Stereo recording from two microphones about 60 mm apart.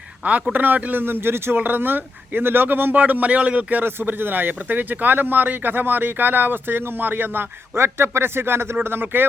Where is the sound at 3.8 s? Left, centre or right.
Right.